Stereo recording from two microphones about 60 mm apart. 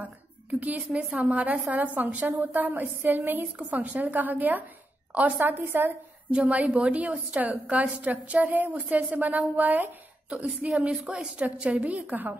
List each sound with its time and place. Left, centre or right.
0.0 s a woman's voice: right
5.5 s a woman's voice: right
6.3 s a woman's voice: right